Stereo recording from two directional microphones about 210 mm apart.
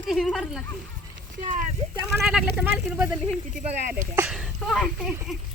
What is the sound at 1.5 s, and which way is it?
Speech, 40° right (ahead or behind).